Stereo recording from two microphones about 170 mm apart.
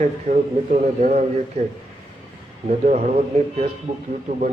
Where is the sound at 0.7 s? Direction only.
45° right (ahead or behind).